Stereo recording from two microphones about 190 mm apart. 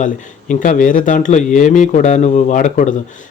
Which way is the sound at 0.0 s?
40° left (ahead or behind).